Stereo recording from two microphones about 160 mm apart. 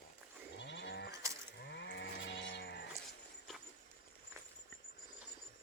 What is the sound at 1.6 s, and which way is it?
Livestock, 90° left.